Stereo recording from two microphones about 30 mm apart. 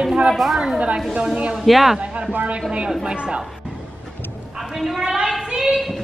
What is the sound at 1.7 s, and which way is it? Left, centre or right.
Speech, centre.